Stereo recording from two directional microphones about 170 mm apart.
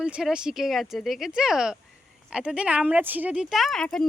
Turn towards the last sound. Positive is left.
turn(degrees=5)  # may be behind; listen again after turning